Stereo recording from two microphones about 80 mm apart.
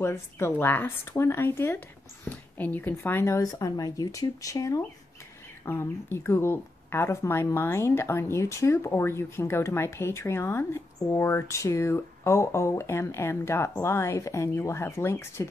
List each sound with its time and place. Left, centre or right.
0.0 s speech: left
2.2 s speech: left
3.3 s speech: left
5.7 s speech: left